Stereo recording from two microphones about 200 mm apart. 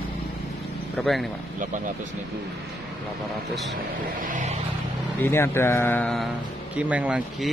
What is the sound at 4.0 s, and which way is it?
Vehicle, 40° right (ahead or behind).